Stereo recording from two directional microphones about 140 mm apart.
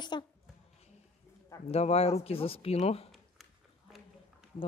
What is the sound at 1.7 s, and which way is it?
Speech, 50° left (ahead or behind).